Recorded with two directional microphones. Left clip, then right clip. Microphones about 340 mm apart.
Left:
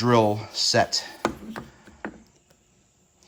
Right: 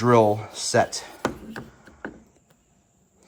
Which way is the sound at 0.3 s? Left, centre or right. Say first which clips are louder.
Even; centre.